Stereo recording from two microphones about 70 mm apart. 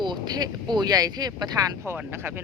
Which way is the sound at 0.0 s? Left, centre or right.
Right.